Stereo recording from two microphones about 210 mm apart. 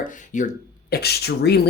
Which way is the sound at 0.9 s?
50° left (ahead or behind).